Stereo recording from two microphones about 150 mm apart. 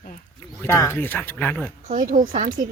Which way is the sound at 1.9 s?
60° right (ahead or behind).